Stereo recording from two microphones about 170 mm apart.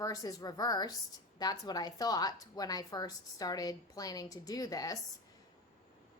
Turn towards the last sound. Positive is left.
turn(degrees=20)  # may be behind; listen again after turning